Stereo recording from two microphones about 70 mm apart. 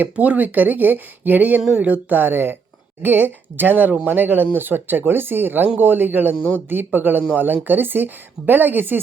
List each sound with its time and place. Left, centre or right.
0.0 s speech: right